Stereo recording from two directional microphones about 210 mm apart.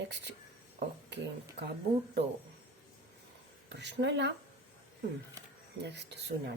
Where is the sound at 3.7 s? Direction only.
55° right (ahead or behind).